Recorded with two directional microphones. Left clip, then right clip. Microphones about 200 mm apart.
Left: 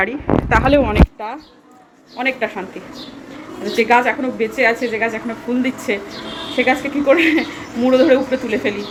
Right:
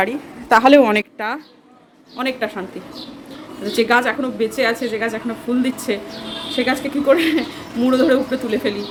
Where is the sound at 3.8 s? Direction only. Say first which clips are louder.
Left 2 dB; 20° right (ahead or behind).